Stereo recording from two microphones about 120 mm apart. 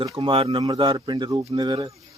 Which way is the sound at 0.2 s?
50° right (ahead or behind).